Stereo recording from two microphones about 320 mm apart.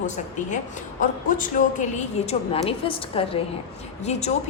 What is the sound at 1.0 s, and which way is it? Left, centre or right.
Speech, left.